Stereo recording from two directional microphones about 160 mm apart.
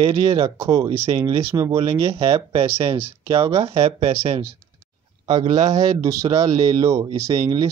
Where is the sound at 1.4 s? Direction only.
20° right (ahead or behind); by 4.5 s 35° right (ahead or behind).